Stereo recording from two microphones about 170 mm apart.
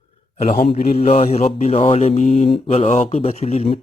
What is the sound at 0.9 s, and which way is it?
Speech, 35° left (ahead or behind).